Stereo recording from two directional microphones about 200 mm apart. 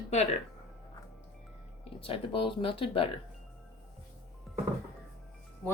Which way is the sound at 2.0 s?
25° left (ahead or behind).